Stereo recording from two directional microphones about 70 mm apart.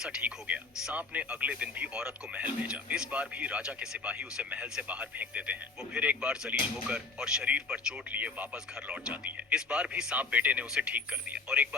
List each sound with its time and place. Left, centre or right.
0.2 s speech: right